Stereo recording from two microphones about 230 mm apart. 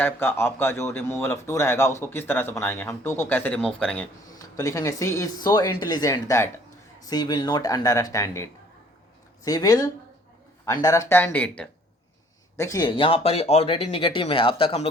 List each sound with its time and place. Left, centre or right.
0.0 s speech: centre
4.3 s speech: centre